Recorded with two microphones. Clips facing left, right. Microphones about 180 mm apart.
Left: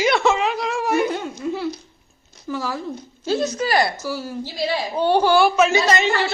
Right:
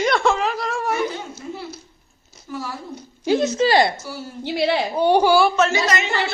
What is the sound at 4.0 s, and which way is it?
Speech, 90° left.